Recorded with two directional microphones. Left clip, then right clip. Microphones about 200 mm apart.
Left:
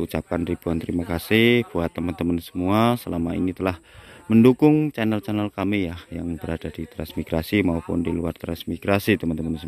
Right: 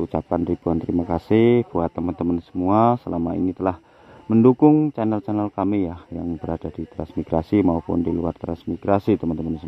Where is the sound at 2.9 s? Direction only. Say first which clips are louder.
Right 2 dB; 25° left (ahead or behind).